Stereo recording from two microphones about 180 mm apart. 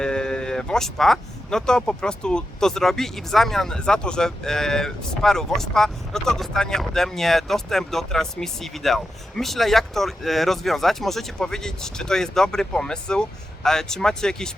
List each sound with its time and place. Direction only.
0.0 s speech: 5° left (ahead or behind)